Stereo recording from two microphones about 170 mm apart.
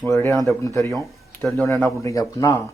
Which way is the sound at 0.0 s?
10° left (ahead or behind).